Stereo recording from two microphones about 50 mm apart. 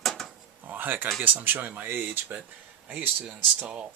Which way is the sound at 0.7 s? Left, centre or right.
Right.